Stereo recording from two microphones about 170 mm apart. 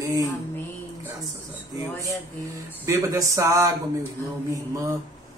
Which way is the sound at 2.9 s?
20° right (ahead or behind).